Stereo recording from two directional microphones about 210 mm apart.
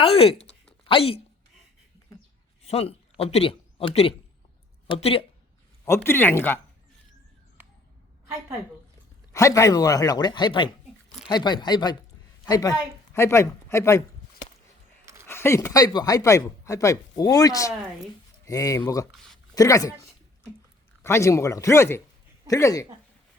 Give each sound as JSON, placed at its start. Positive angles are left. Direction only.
{"t": 0.0, "sound": "speech", "side_deg": 25}
{"t": 2.6, "sound": "speech", "side_deg": 30}
{"t": 5.8, "sound": "speech", "side_deg": 10}
{"t": 9.3, "sound": "speech", "side_deg": 15}
{"t": 15.3, "sound": "speech", "side_deg": 10}
{"t": 19.1, "sound": "speech", "side_deg": 0}
{"t": 19.5, "sound": "speech", "side_deg": 15}
{"t": 21.0, "sound": "speech", "side_deg": 15}